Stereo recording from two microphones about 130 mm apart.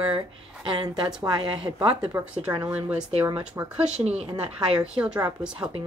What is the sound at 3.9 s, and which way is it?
Speech, 55° right (ahead or behind).